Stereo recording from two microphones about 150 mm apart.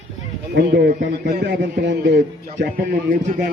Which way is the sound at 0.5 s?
90° right.